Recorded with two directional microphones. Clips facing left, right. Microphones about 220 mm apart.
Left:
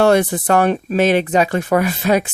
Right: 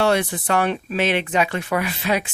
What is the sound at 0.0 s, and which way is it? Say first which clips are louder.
Speech: left 6 dB; 45° left (ahead or behind).